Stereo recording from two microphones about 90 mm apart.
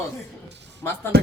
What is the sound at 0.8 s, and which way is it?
Speech, 30° left (ahead or behind).